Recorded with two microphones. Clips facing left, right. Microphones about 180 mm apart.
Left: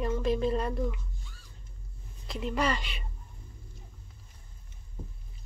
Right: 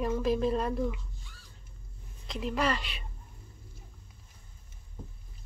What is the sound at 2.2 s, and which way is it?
Speech, centre (ahead or behind).